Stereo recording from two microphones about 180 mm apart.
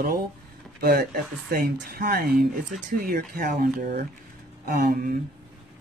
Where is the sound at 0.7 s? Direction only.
55° right (ahead or behind).